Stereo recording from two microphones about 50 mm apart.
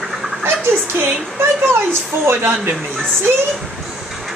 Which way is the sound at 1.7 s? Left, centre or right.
Right.